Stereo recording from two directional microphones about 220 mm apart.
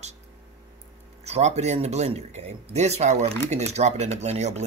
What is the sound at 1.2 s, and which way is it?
Speech, 30° right (ahead or behind).